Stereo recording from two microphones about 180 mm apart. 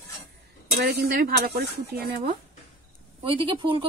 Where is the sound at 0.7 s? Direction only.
60° right (ahead or behind).